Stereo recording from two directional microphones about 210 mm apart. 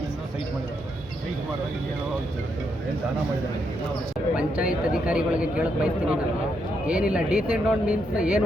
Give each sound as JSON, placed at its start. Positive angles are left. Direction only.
{"t": 4.4, "sound": "a man's voice", "side_deg": -5}